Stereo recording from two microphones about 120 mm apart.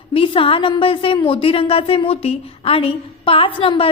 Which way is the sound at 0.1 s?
45° left (ahead or behind).